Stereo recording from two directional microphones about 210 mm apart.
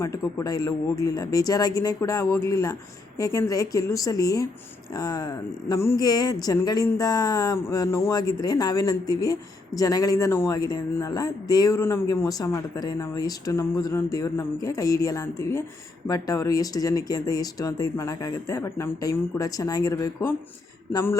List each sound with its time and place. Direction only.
0.0 s speech: 15° left (ahead or behind)